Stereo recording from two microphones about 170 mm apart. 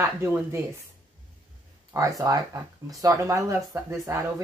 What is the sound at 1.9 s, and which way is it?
Speech, 20° right (ahead or behind).